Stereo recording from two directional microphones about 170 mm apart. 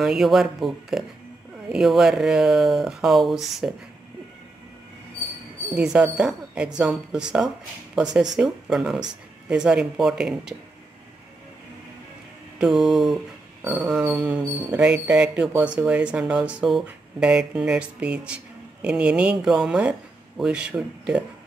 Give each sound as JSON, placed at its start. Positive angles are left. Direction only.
{"t": 0.0, "sound": "speech", "side_deg": -5}
{"t": 5.8, "sound": "speech", "side_deg": -5}
{"t": 12.5, "sound": "speech", "side_deg": -5}